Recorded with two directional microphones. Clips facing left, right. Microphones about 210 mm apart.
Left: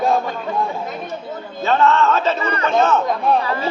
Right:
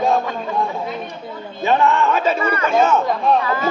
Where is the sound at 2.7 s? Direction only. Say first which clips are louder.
Even; 10° right (ahead or behind).